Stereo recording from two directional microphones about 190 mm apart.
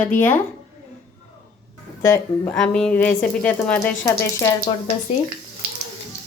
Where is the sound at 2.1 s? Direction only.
10° left (ahead or behind).